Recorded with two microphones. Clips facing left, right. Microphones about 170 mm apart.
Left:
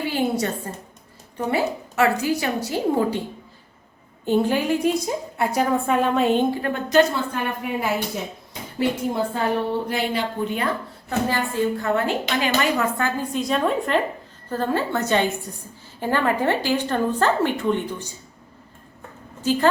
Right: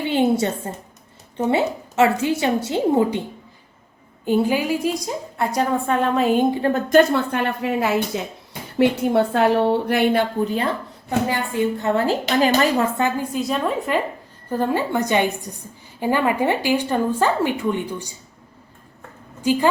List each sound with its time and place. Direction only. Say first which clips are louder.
0.0 s a woman's voice: right 4 dB; 25° right (ahead or behind)
4.3 s a woman's voice: right 1 dB; 10° right (ahead or behind)
6.5 s a woman's voice: right 5 dB; 30° right (ahead or behind)
6.9 s a woman's voice: right 2 dB; 65° right (ahead or behind); by 8.2 s 85° right
8.8 s a woman's voice: right 6 dB; 70° right (ahead or behind)
10.4 s a woman's voice: right 3 dB; 35° right (ahead or behind)
11.1 s a woman's voice: right 1 dB; 15° right (ahead or behind)
11.9 s a woman's voice: right 4 dB; 35° right (ahead or behind)
13.3 s a woman's voice: even; centre (ahead or behind)
19.4 s speech: right 2 dB; 15° right (ahead or behind)